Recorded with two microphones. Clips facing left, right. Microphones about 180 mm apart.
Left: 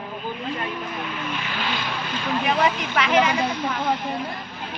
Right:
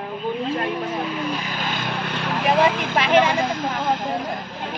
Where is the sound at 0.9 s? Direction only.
40° right (ahead or behind); by 2.9 s 60° right (ahead or behind).